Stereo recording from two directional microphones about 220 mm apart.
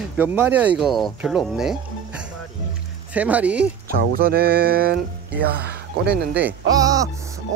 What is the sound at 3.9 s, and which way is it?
Speech, 45° right (ahead or behind).